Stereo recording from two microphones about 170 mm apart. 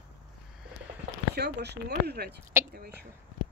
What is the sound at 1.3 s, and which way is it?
Speech, 80° right.